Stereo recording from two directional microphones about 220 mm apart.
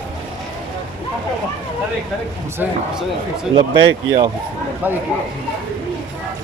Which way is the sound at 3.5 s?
20° right (ahead or behind).